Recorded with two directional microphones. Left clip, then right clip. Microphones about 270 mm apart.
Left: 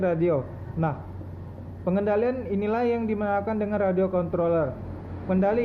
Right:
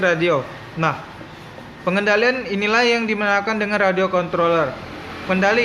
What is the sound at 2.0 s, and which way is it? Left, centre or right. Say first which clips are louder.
A man's voice: right 8 dB; right.